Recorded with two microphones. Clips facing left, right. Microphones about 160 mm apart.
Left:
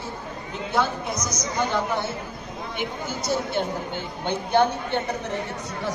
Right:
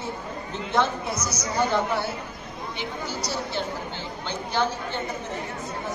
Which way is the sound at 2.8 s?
50° left (ahead or behind).